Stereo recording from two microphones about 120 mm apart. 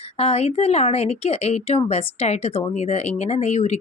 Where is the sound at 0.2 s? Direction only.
60° left (ahead or behind).